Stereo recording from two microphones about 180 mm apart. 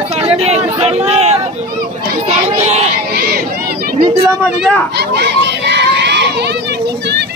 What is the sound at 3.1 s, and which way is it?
Chatter, 55° right (ahead or behind).